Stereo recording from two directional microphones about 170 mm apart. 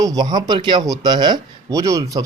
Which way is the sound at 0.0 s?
20° right (ahead or behind).